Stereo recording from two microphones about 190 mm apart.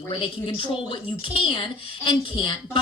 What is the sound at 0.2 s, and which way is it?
A woman's voice, 25° left (ahead or behind).